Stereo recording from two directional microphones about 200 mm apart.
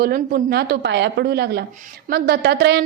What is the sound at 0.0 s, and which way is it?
A woman's voice, 50° right (ahead or behind).